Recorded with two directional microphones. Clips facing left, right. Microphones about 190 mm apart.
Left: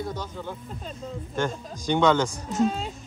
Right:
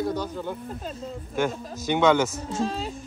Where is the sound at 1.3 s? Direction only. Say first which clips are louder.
Right 2 dB; 10° right (ahead or behind).